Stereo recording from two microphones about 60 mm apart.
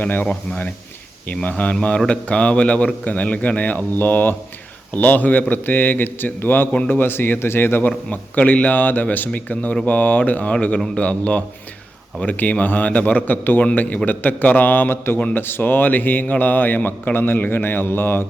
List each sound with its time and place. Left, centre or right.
0.0 s a man's voice: left
7.9 s a man's voice: left